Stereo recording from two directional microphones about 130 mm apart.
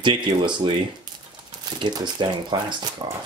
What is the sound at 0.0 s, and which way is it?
Speech, 40° right (ahead or behind).